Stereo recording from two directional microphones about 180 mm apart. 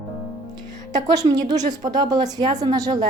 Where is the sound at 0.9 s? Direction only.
20° right (ahead or behind).